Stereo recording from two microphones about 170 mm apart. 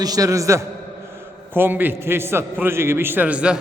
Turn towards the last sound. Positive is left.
turn(degrees=-5)  # may be behind; listen again after turning